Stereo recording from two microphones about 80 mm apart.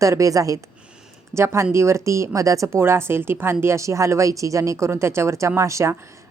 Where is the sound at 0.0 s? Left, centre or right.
Right.